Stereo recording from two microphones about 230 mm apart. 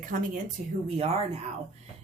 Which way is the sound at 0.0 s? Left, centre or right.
Right.